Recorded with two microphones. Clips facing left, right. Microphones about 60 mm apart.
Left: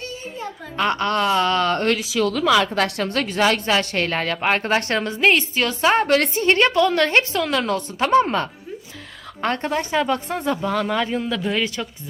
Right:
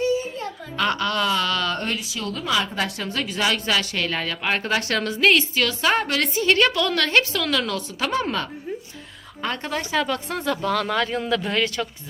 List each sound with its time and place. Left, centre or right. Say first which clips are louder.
0.8 s a woman's voice: left 3 dB; left
2.0 s speech: left 9 dB; left
2.7 s a woman's voice: left 5 dB; left
9.4 s a woman's voice: left 5 dB; left
9.6 s a woman's voice: left 2 dB; left; by 11.9 s centre